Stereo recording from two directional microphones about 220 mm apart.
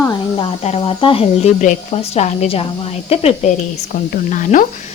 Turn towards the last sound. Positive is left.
turn(degrees=35)  # may be behind; listen again after turning